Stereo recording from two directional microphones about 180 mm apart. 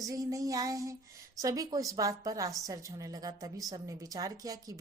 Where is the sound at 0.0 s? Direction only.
20° right (ahead or behind).